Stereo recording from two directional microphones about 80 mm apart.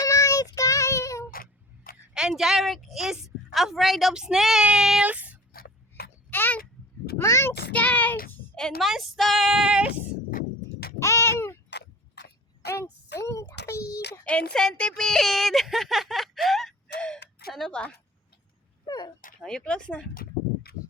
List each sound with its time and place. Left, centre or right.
0.0 s child singing: left
2.1 s a woman's voice: centre
4.6 s child singing: centre
5.0 s speech: centre
6.3 s a sound: left
7.2 s a child's voice: left
7.7 s child singing: centre
8.5 s a woman's voice: centre
11.0 s a sound: left
12.7 s a child's voice: left
14.3 s a woman's voice: centre
17.7 s speech: centre
18.9 s a sound: left
19.4 s speech: centre